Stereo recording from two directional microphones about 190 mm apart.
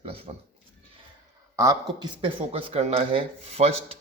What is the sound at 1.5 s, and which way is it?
A man's voice, 20° right (ahead or behind).